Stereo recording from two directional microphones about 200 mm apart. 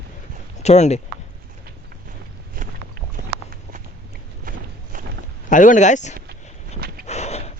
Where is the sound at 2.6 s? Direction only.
45° right (ahead or behind).